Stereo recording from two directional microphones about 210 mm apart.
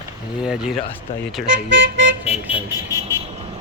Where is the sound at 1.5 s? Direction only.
60° right (ahead or behind).